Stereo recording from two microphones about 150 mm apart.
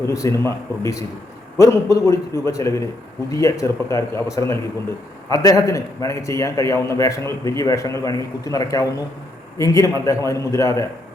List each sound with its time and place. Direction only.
0.0 s a man's voice: 20° left (ahead or behind)